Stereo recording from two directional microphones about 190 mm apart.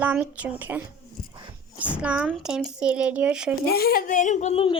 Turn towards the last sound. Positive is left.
turn(degrees=30)  # may be behind; listen again after turning